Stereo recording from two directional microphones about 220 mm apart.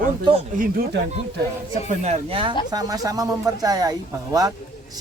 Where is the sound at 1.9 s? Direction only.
30° right (ahead or behind).